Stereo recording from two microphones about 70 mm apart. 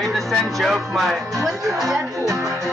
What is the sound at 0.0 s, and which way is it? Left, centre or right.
Speech, centre.